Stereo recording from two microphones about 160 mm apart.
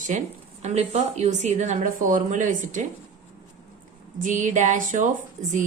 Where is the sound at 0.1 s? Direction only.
50° right (ahead or behind).